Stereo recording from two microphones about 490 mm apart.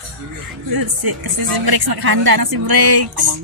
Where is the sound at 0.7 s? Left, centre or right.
Right.